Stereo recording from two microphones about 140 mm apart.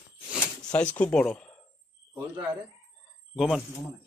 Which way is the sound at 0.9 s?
5° left (ahead or behind).